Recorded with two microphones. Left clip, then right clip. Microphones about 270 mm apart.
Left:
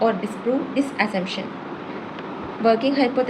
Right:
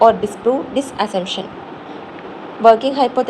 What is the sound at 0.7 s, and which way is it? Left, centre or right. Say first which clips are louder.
Speech: right 4 dB; centre.